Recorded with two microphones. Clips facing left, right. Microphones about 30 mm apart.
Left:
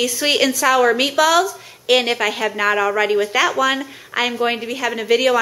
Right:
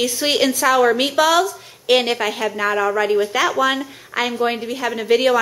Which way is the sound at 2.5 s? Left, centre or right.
Left.